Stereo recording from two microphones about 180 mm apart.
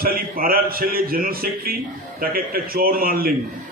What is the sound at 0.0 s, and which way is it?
A man's voice, 55° right (ahead or behind).